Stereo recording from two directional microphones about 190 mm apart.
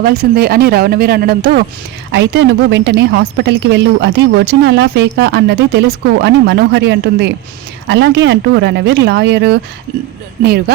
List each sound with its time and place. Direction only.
0.0 s a woman's voice: 55° right (ahead or behind)